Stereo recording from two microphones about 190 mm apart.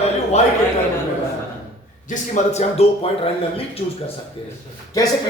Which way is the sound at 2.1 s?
40° left (ahead or behind).